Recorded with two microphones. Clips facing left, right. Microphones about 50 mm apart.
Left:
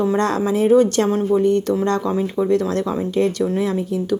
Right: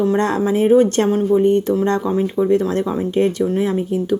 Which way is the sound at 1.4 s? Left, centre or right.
Centre.